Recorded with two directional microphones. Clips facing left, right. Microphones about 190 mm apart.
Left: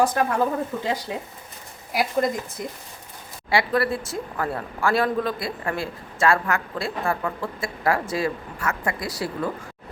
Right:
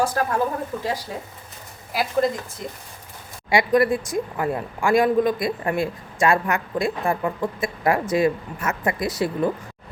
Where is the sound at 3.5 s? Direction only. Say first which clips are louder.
Right 4 dB; 15° right (ahead or behind).